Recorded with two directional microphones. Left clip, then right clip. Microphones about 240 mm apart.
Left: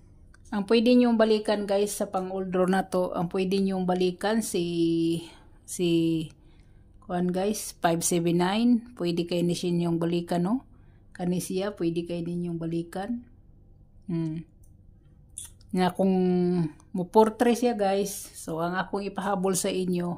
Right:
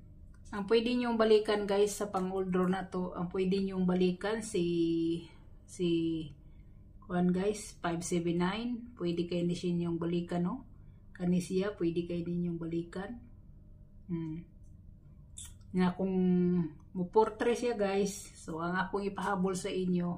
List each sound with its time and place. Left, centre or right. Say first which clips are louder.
0.5 s a woman's voice: left 7 dB; left
15.7 s a woman's voice: left 9 dB; left